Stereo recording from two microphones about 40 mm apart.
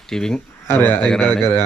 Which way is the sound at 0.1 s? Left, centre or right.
Centre.